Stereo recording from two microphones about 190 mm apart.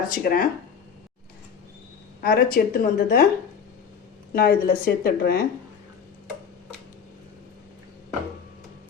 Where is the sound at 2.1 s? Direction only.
50° left (ahead or behind).